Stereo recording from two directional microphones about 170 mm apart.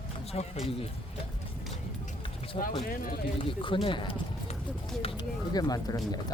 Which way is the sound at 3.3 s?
30° left (ahead or behind).